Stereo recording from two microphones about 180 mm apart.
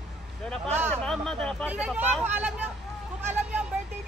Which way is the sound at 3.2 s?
5° right (ahead or behind).